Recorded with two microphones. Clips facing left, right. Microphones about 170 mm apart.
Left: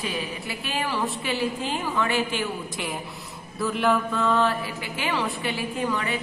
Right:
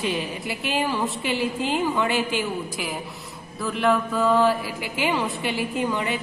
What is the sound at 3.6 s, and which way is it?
Speech, centre (ahead or behind).